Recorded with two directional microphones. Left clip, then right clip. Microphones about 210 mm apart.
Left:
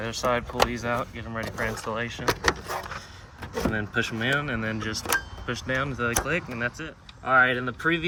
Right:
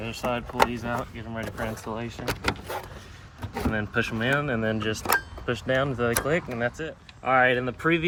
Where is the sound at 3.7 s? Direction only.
10° right (ahead or behind).